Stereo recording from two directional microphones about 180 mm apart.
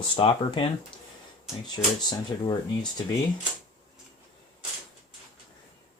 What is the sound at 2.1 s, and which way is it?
Speech, 25° left (ahead or behind).